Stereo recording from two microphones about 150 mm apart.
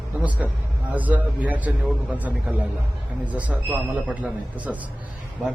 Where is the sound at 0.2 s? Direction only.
10° right (ahead or behind).